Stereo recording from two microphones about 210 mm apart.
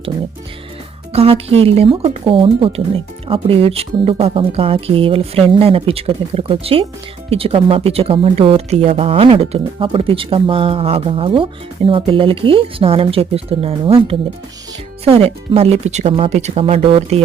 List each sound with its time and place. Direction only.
1.1 s speech: 30° right (ahead or behind)